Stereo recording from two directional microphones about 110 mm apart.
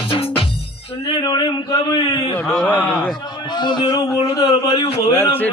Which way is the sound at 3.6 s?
45° left (ahead or behind).